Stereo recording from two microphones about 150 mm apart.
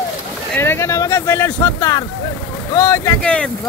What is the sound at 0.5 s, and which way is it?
Speech, 15° left (ahead or behind).